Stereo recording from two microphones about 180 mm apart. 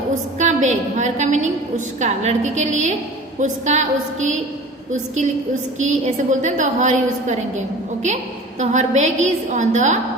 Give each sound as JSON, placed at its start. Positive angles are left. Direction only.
{"t": 0.3, "sound": "a woman's voice", "side_deg": -40}